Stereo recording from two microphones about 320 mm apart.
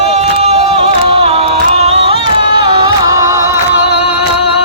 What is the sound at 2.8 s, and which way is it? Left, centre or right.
Music, centre.